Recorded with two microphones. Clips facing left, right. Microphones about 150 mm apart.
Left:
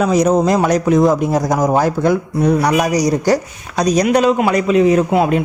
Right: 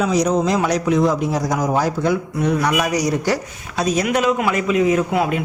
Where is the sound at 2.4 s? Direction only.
35° left (ahead or behind).